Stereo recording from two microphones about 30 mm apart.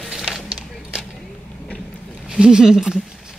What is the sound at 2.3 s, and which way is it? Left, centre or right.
Speech, right.